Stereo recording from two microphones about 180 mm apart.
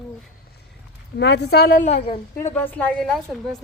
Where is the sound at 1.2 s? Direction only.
70° left (ahead or behind).